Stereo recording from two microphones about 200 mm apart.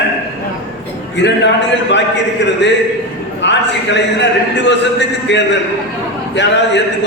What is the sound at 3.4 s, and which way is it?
A man's voice, 60° left (ahead or behind).